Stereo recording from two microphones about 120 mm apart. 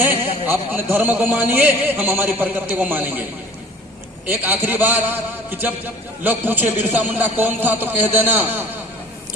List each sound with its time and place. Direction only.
0.5 s a man's voice: 15° right (ahead or behind)
4.3 s a man's voice: 15° right (ahead or behind)